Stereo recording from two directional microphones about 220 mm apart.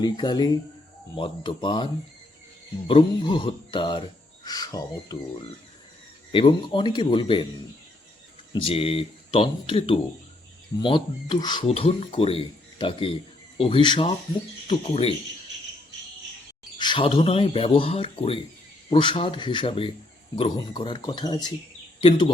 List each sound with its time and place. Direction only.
0.0 s speech: 20° left (ahead or behind)
6.3 s speech: 25° left (ahead or behind)
8.5 s speech: 25° left (ahead or behind)
16.7 s speech: 20° left (ahead or behind)